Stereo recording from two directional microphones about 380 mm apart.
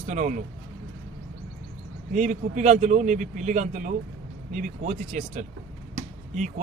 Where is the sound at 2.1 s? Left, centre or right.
Centre.